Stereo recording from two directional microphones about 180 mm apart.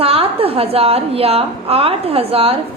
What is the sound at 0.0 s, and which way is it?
A woman's voice, 30° right (ahead or behind).